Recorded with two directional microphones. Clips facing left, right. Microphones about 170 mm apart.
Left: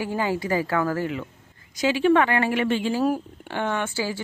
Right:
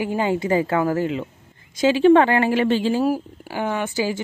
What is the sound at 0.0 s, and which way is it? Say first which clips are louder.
A woman's voice: right 4 dB; 20° right (ahead or behind).